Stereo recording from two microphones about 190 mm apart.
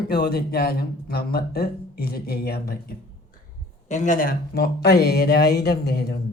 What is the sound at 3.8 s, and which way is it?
Speech, 40° left (ahead or behind).